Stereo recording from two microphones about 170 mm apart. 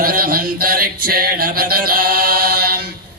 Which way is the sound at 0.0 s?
60° right (ahead or behind).